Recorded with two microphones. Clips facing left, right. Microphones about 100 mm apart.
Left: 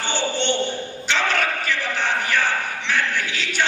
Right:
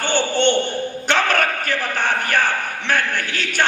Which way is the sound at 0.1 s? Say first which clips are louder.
Right 6 dB; 50° right (ahead or behind).